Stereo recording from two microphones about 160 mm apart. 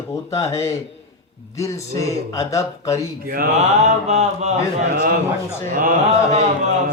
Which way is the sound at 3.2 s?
65° right (ahead or behind).